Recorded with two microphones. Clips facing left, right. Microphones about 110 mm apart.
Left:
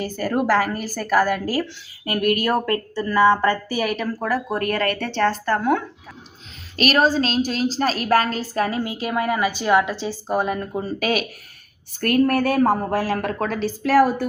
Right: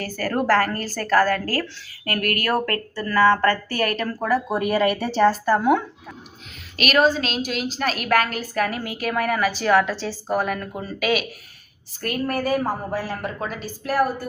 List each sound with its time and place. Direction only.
0.0 s a woman's voice: 20° left (ahead or behind); by 5.8 s 5° right (ahead or behind)
6.7 s a woman's voice: 35° left (ahead or behind)
11.9 s a woman's voice: 60° left (ahead or behind); by 14.3 s 90° left